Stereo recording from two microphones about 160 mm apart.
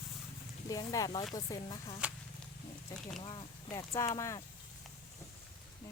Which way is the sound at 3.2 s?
30° left (ahead or behind).